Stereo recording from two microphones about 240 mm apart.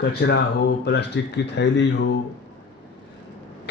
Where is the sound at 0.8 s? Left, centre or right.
Left.